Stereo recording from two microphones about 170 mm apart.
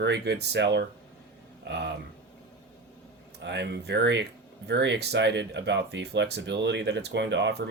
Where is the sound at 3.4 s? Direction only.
90° right.